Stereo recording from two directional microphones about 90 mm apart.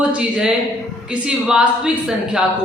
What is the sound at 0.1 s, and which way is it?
A woman's voice, 10° right (ahead or behind).